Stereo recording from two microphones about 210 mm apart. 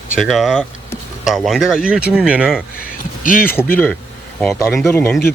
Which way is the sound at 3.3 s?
40° left (ahead or behind).